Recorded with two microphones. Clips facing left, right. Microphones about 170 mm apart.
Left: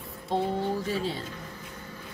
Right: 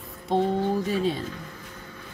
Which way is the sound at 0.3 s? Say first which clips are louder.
Right 4 dB; 20° right (ahead or behind).